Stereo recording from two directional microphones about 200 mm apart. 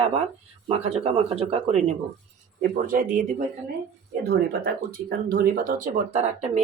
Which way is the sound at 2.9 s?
40° right (ahead or behind).